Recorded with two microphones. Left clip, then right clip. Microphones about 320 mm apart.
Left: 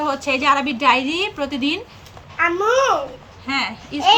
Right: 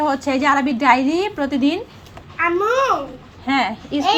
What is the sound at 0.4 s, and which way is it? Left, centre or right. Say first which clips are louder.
A woman's voice: right 1 dB; left.